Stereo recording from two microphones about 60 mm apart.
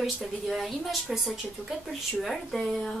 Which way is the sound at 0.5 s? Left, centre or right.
Centre.